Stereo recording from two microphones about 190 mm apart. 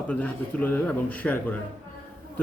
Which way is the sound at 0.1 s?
10° left (ahead or behind).